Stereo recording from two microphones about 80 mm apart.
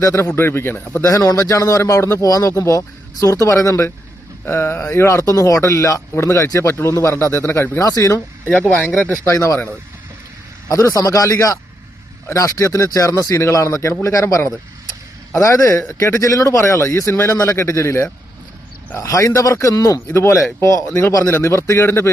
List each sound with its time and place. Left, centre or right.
0.0 s speech: left
1.0 s speech: left
4.4 s speech: left
8.4 s speech: centre
8.7 s speech: centre
9.3 s speech: left
10.7 s speech: left